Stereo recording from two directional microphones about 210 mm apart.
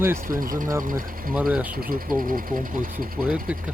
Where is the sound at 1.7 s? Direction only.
45° right (ahead or behind).